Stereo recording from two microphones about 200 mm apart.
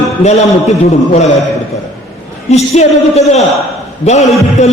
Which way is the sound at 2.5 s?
30° left (ahead or behind).